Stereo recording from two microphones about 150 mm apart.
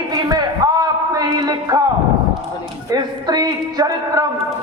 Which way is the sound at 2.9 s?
30° right (ahead or behind).